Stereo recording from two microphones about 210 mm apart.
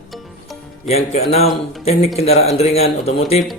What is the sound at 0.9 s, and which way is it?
A man's voice, 30° left (ahead or behind).